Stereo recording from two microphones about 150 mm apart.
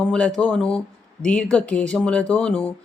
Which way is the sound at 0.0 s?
5° left (ahead or behind).